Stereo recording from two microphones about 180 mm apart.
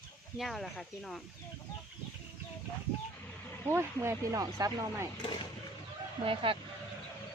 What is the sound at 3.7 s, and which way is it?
Speech, 15° right (ahead or behind).